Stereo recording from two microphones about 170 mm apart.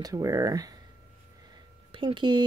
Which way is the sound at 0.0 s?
20° right (ahead or behind).